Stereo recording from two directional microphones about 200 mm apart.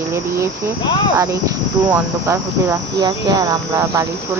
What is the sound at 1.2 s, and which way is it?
Speech, 15° right (ahead or behind).